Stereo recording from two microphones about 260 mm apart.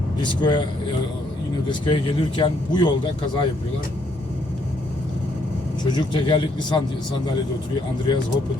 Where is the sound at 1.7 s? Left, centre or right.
Centre.